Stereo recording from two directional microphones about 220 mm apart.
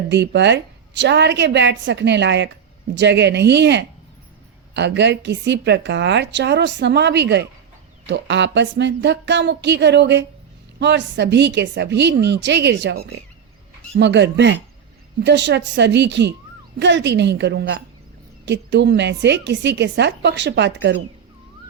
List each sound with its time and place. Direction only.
0.1 s a woman's voice: 50° right (ahead or behind)